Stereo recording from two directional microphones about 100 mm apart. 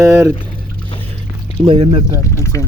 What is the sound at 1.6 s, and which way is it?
Speech, 65° right (ahead or behind).